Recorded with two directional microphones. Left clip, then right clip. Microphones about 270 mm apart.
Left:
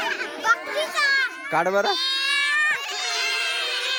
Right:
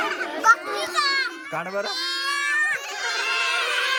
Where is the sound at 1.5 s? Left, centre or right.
Centre.